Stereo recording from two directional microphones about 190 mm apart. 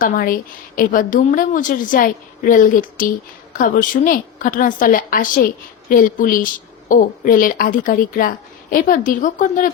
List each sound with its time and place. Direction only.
0.0 s a woman's voice: 45° left (ahead or behind)